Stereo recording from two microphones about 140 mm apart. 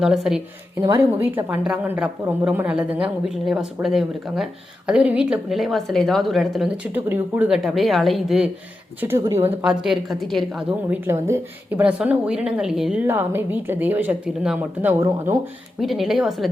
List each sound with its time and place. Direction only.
0.0 s a woman's voice: 5° right (ahead or behind)
0.8 s a woman's voice: 20° right (ahead or behind); by 6.7 s centre (ahead or behind)
6.9 s a woman's voice: 10° right (ahead or behind)
9.0 s a woman's voice: 15° right (ahead or behind)
9.8 s a woman's voice: centre (ahead or behind)
10.7 s a woman's voice: 15° right (ahead or behind)
13.1 s a woman's voice: 15° right (ahead or behind)
15.0 s speech: 25° right (ahead or behind)
15.8 s a woman's voice: centre (ahead or behind)